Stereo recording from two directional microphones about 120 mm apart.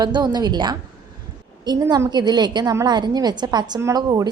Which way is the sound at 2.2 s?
35° right (ahead or behind).